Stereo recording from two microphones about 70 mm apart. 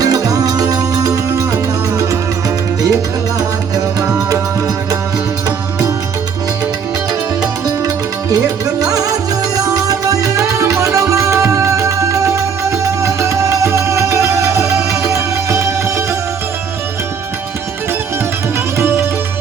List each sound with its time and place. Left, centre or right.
0.0 s music: right
7.9 s music: right
18.8 s music: right